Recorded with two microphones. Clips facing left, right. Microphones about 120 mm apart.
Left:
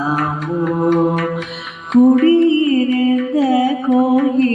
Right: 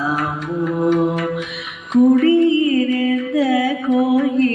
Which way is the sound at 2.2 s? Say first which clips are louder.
Left 2 dB; 30° left (ahead or behind).